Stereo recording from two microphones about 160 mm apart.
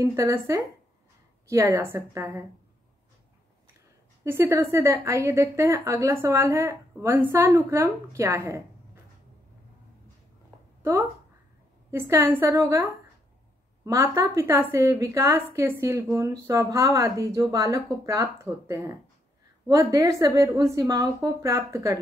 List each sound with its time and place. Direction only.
0.0 s a woman's voice: 20° right (ahead or behind)
4.2 s a woman's voice: 15° right (ahead or behind)
10.8 s a woman's voice: 15° right (ahead or behind)
13.8 s a woman's voice: 20° right (ahead or behind)